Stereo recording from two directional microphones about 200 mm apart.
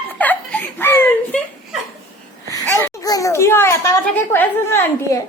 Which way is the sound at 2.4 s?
15° left (ahead or behind).